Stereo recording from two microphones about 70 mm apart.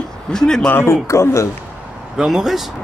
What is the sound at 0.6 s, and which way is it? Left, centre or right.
Speech, left.